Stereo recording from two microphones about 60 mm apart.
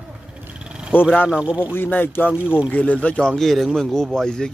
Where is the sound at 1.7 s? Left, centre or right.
Left.